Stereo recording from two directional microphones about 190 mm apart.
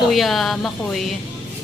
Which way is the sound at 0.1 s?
Centre (ahead or behind).